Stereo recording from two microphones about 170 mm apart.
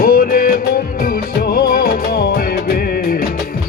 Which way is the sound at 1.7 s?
60° left (ahead or behind).